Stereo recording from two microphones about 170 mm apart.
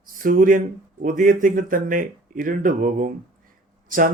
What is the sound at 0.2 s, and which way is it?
Speech, 55° right (ahead or behind).